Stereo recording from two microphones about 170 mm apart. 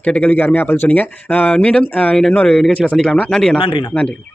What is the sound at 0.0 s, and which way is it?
Speech, 5° left (ahead or behind).